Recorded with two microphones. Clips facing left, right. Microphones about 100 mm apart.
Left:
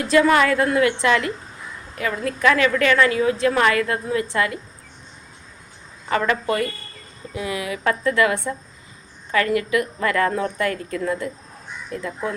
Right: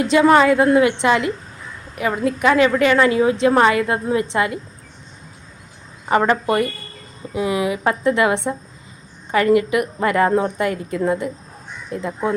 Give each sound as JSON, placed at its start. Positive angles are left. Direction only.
{"t": 0.0, "sound": "a woman's voice", "side_deg": -20}
{"t": 6.4, "sound": "a woman's voice", "side_deg": -20}